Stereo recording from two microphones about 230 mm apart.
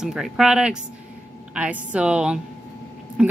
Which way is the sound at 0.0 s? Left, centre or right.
Centre.